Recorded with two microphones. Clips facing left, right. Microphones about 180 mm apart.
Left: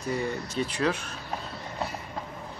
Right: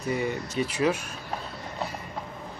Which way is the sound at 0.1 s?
5° right (ahead or behind).